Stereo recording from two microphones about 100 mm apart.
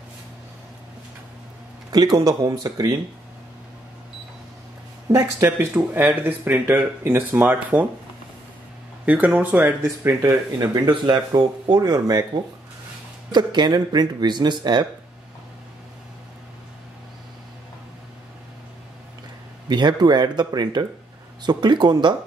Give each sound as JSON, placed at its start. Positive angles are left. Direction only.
{"t": 1.9, "sound": "speech", "side_deg": -40}
{"t": 5.1, "sound": "speech", "side_deg": -25}
{"t": 9.0, "sound": "speech", "side_deg": -15}
{"t": 10.6, "sound": "speech", "side_deg": -45}
{"t": 13.3, "sound": "speech", "side_deg": -45}
{"t": 19.7, "sound": "speech", "side_deg": -45}